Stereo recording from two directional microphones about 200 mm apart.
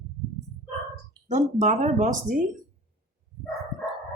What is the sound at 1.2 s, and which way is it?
A woman's voice, 35° right (ahead or behind).